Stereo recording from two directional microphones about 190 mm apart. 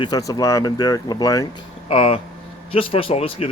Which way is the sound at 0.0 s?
20° left (ahead or behind).